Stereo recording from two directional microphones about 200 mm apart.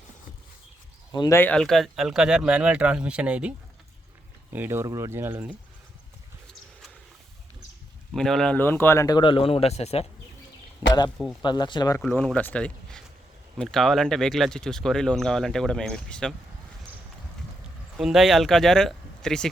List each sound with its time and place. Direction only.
1.1 s speech: 15° left (ahead or behind); by 3.5 s 5° right (ahead or behind)
4.5 s speech: 10° right (ahead or behind)
8.1 s speech: centre (ahead or behind); by 10.1 s 30° left (ahead or behind)
11.4 s speech: 20° left (ahead or behind)
12.0 s speech: 5° left (ahead or behind)
17.9 s speech: centre (ahead or behind)